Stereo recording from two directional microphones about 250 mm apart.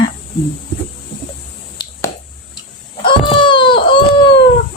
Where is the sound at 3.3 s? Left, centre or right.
Centre.